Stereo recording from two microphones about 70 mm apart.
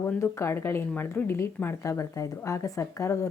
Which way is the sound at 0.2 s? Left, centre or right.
Left.